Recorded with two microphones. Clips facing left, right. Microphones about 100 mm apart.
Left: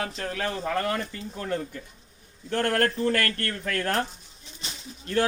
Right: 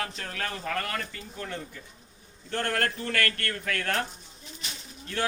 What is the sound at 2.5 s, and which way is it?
Speech, 50° left (ahead or behind).